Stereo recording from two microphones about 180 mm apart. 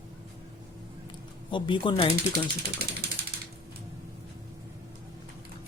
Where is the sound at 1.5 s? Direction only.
25° left (ahead or behind).